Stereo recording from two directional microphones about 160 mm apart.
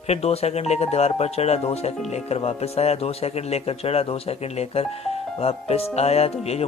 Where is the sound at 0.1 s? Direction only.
40° left (ahead or behind).